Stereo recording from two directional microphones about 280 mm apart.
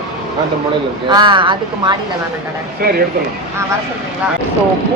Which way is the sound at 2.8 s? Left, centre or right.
Right.